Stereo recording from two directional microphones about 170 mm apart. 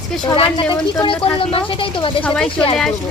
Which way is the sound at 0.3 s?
25° left (ahead or behind).